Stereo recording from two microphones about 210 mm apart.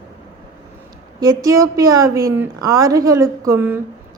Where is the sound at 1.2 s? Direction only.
15° right (ahead or behind).